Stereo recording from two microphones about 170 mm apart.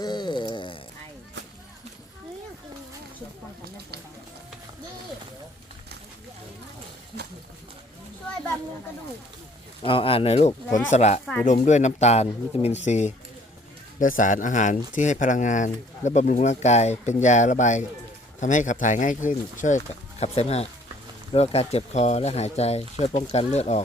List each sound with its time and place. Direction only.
0.0 s a sound: 25° left (ahead or behind)
9.8 s speech: 30° left (ahead or behind)
10.7 s speech: 20° left (ahead or behind)
10.9 s speech: 40° left (ahead or behind)